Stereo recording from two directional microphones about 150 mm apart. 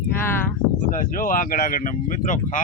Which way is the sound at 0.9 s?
65° left (ahead or behind).